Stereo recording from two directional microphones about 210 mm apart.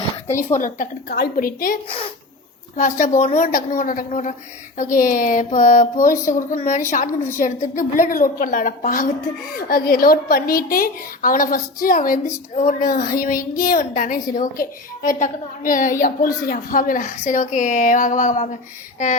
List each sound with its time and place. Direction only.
0.6 s a woman's voice: 40° left (ahead or behind)